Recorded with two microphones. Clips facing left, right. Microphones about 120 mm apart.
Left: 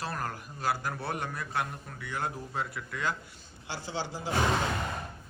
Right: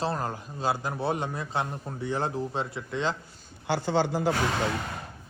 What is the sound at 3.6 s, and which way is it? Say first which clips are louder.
Speech: right 11 dB; 60° right (ahead or behind).